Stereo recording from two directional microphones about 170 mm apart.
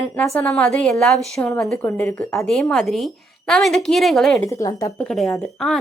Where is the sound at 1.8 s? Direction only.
15° left (ahead or behind).